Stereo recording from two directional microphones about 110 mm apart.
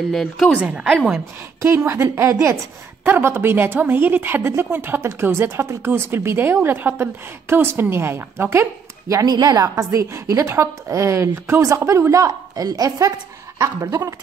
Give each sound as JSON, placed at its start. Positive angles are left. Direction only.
{"t": 0.1, "sound": "speech", "side_deg": 5}
{"t": 0.6, "sound": "a woman's voice", "side_deg": -10}
{"t": 1.6, "sound": "speech", "side_deg": -25}
{"t": 9.1, "sound": "speech", "side_deg": -35}